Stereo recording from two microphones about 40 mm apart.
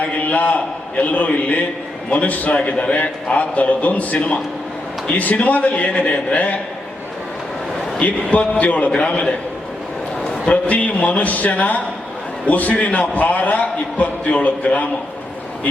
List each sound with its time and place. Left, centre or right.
0.3 s a man's voice: left
2.6 s a man's voice: left
3.3 s a man's voice: left
8.0 s a man's voice: left
8.9 s a man's voice: left
10.5 s a man's voice: left